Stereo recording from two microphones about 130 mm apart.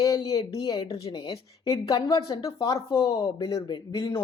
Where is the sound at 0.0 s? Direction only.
25° left (ahead or behind).